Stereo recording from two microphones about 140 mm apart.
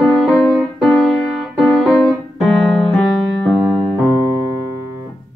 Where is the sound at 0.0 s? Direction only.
5° left (ahead or behind).